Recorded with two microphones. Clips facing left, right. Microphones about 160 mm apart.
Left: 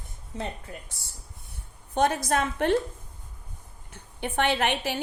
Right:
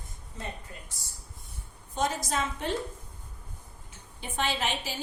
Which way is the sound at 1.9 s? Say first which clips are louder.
Left 6 dB; 60° left (ahead or behind).